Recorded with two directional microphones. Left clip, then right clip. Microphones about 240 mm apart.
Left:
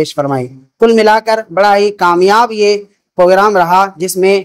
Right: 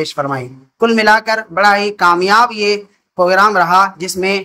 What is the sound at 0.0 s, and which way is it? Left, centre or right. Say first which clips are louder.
Speech: left 4 dB; left.